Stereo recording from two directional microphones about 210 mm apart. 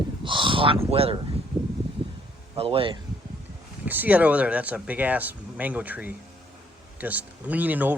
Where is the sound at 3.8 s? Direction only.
10° right (ahead or behind).